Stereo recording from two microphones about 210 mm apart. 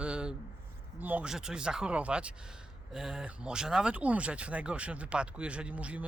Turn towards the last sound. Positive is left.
turn(degrees=-5)  # may be behind; listen again after turning